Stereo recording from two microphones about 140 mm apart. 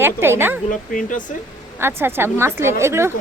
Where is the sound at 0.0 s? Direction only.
15° right (ahead or behind).